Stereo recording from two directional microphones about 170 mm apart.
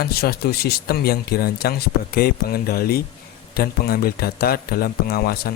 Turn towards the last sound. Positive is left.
turn(degrees=65)  # may be behind; listen again after turning